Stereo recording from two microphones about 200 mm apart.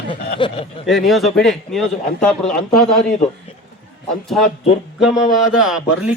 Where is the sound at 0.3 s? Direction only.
25° left (ahead or behind).